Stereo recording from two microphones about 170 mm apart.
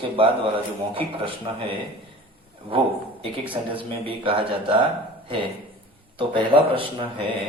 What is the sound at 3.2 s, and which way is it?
Speech, 30° right (ahead or behind).